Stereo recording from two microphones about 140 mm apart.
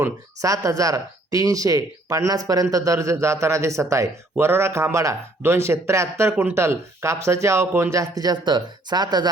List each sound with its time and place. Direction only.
0.4 s speech: 25° right (ahead or behind)